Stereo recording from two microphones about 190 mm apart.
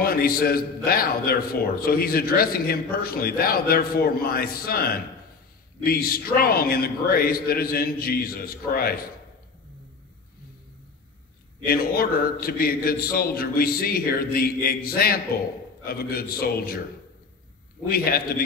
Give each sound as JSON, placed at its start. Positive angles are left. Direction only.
{"t": 0.0, "sound": "a man's voice", "side_deg": 50}
{"t": 11.6, "sound": "a man's voice", "side_deg": 50}
{"t": 17.8, "sound": "a man's voice", "side_deg": 50}